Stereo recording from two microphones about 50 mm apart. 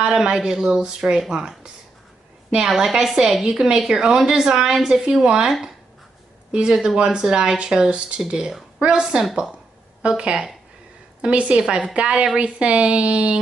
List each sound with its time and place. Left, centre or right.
0.0 s a woman's voice: centre
2.5 s a woman's voice: centre
3.4 s a woman's voice: centre
6.5 s a woman's voice: centre